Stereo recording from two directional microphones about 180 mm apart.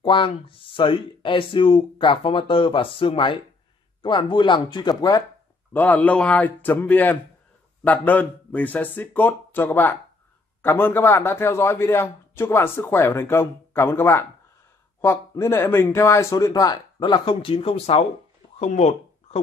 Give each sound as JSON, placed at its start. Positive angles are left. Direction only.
{"t": 0.0, "sound": "speech", "side_deg": 30}
{"t": 5.7, "sound": "a man's voice", "side_deg": 10}